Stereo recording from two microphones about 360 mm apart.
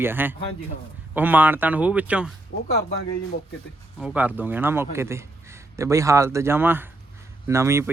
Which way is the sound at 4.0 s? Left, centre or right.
Centre.